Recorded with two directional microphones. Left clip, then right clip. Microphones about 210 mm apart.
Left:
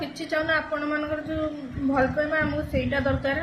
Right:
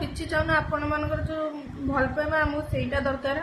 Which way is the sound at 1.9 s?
15° right (ahead or behind).